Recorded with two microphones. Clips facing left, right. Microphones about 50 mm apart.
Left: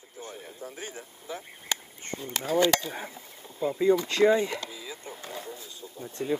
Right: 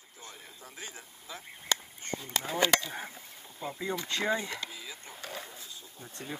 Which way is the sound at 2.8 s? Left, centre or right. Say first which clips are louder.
Left 3 dB; left.